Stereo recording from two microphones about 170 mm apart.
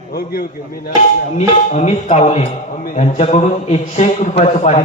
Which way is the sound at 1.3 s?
40° left (ahead or behind).